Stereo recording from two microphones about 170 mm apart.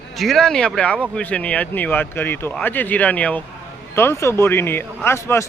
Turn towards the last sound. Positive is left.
turn(degrees=15)  # may be behind; listen again after turning